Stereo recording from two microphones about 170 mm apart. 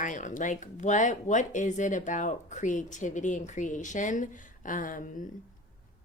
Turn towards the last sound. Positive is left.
turn(degrees=50)  # may be behind; listen again after turning